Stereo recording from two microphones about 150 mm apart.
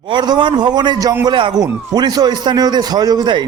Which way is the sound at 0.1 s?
30° right (ahead or behind).